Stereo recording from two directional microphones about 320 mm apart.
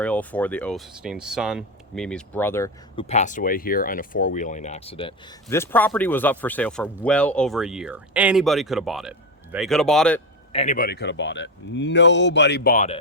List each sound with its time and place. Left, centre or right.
0.0 s speech: centre
10.5 s a man's voice: left